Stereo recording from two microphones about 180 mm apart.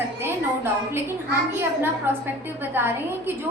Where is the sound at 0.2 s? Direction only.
15° right (ahead or behind).